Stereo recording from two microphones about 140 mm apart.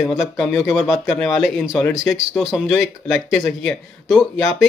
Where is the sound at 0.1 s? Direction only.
Centre (ahead or behind).